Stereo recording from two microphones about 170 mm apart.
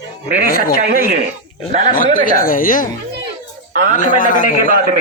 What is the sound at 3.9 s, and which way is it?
Speech, 50° left (ahead or behind).